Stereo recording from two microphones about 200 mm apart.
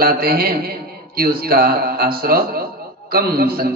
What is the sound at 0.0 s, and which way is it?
Speech, 50° right (ahead or behind).